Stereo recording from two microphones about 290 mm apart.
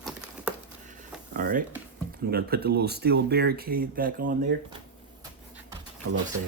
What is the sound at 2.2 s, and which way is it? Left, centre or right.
Speech, right.